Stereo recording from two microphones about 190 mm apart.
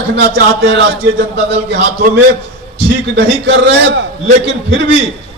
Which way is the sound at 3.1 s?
60° right (ahead or behind).